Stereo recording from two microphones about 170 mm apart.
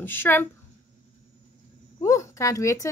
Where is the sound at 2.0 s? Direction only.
20° left (ahead or behind).